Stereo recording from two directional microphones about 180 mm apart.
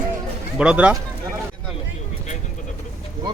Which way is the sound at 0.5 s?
5° right (ahead or behind).